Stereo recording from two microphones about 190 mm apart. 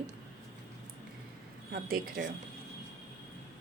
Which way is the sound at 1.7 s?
50° right (ahead or behind).